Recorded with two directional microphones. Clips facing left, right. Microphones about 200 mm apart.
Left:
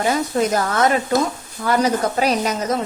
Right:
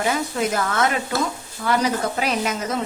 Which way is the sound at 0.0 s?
40° left (ahead or behind).